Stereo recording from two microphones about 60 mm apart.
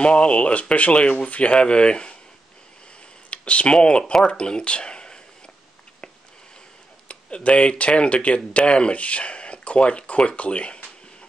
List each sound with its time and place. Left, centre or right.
0.0 s speech: centre
3.3 s a sound: left
3.7 s speech: centre
4.3 s speech: centre
7.1 s speech: centre